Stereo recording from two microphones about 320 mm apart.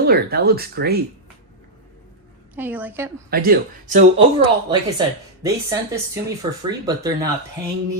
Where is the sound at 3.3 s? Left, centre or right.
Right.